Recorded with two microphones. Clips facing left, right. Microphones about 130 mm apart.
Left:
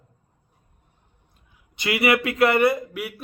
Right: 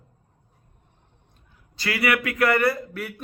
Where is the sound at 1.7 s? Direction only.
20° left (ahead or behind).